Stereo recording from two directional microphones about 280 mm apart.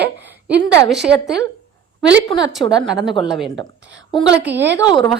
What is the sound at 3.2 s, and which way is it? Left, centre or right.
Speech, centre.